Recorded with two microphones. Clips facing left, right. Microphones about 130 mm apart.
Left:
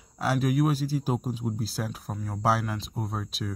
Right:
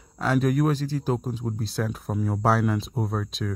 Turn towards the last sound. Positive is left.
turn(degrees=5)  # may be behind; listen again after turning